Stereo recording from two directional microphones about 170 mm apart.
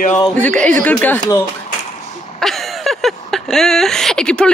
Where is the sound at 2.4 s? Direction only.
Centre (ahead or behind).